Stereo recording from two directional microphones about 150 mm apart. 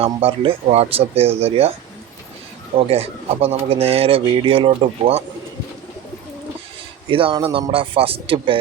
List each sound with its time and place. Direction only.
0.0 s speech: 40° right (ahead or behind)
2.7 s a man's voice: 40° right (ahead or behind)
7.1 s a man's voice: 35° right (ahead or behind)